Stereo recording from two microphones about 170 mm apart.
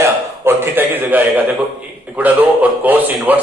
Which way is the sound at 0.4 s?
10° right (ahead or behind).